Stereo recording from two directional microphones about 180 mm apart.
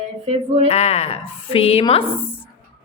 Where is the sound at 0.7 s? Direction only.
35° left (ahead or behind).